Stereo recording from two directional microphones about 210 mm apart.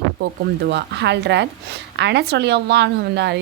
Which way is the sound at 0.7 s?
55° right (ahead or behind).